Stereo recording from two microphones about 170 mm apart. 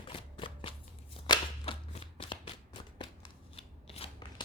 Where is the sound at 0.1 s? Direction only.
30° left (ahead or behind).